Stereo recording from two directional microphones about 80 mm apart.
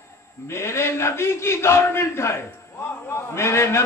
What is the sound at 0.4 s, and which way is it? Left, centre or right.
A man's voice, left.